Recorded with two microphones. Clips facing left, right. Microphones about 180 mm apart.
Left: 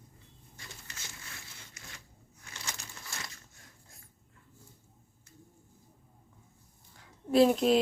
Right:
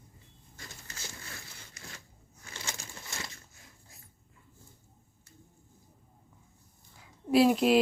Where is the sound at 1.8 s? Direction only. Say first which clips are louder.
Right 3 dB; 35° right (ahead or behind).